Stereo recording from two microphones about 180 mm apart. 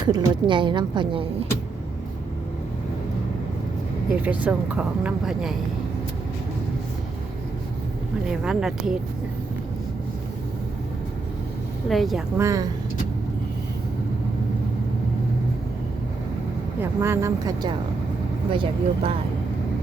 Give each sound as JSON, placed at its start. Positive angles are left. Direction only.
{"t": 0.0, "sound": "a woman's voice", "side_deg": -25}
{"t": 4.1, "sound": "speech", "side_deg": -10}
{"t": 8.3, "sound": "speech", "side_deg": -5}
{"t": 11.9, "sound": "speech", "side_deg": 0}
{"t": 12.4, "sound": "speech", "side_deg": -15}
{"t": 16.8, "sound": "a woman's voice", "side_deg": -15}